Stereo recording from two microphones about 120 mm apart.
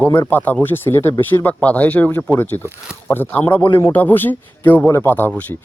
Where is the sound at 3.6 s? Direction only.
45° left (ahead or behind).